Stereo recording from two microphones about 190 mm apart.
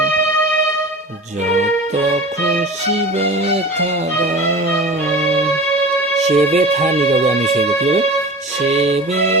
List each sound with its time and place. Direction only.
3.2 s speech: 30° right (ahead or behind)
4.3 s music: 45° right (ahead or behind)
5.2 s music: 35° right (ahead or behind)
6.2 s speech: 35° right (ahead or behind)